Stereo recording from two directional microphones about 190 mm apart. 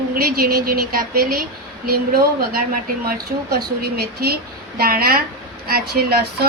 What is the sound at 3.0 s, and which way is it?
Speech, 55° right (ahead or behind).